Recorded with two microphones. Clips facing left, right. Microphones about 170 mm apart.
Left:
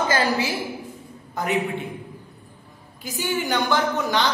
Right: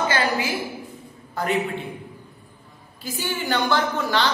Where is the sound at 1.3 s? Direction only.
15° left (ahead or behind).